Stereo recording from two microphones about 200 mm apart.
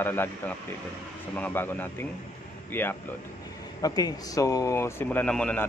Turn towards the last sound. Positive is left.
turn(degrees=5)  # may be behind; listen again after turning